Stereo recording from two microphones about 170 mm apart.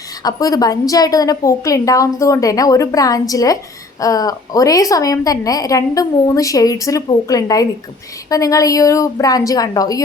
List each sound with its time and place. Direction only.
0.2 s a woman's voice: 20° left (ahead or behind)